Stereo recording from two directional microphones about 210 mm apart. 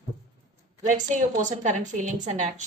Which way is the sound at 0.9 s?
35° right (ahead or behind).